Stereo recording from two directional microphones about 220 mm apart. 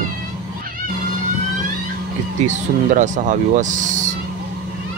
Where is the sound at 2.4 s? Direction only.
35° right (ahead or behind).